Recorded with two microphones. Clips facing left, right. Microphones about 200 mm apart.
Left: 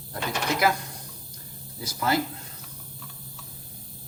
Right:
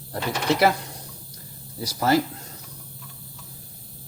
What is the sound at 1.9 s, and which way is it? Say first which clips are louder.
Speech: right 5 dB; 40° right (ahead or behind).